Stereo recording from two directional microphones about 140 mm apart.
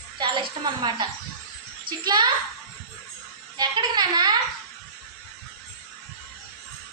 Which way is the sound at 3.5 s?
30° right (ahead or behind).